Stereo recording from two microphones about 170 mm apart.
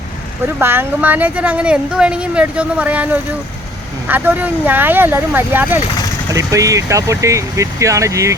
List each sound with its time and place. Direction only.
0.4 s speech: 15° right (ahead or behind)